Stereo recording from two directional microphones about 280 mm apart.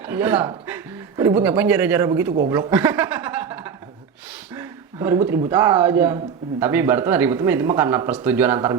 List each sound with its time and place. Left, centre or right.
0.0 s speech: centre
2.2 s speech: right
2.5 s speech: centre